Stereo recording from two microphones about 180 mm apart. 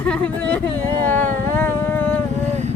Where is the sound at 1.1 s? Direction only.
10° left (ahead or behind).